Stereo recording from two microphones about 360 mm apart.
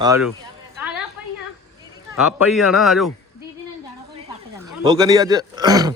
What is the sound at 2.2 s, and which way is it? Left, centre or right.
Speech, centre.